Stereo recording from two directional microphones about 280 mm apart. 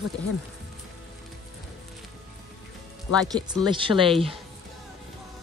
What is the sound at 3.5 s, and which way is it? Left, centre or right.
Speech, centre.